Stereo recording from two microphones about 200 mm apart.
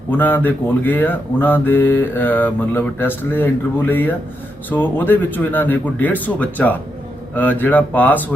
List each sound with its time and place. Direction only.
0.1 s speech: 10° left (ahead or behind)